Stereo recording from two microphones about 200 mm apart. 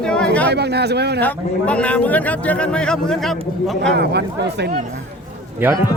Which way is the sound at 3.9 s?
55° right (ahead or behind).